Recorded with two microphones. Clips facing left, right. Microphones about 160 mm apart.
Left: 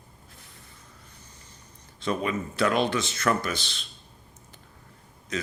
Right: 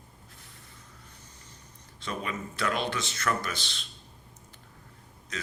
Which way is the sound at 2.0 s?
20° left (ahead or behind).